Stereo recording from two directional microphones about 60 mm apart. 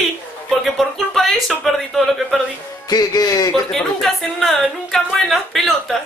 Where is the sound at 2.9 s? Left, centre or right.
Left.